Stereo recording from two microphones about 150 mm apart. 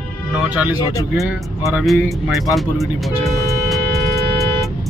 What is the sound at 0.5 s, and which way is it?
Speech, 10° right (ahead or behind).